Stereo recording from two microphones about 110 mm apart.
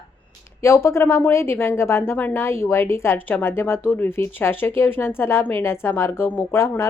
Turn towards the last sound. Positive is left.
turn(degrees=25)  # may be behind; listen again after turning